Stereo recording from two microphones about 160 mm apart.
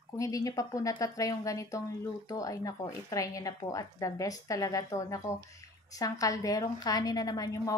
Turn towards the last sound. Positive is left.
turn(degrees=20)  # may be behind; listen again after turning